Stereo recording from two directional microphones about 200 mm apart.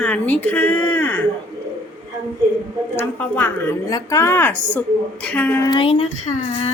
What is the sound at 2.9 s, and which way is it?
A woman's voice, 10° left (ahead or behind).